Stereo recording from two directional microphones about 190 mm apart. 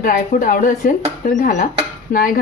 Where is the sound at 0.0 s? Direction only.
45° left (ahead or behind).